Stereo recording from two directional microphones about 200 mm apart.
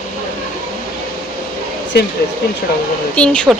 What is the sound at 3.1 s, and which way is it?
Speech, 5° left (ahead or behind).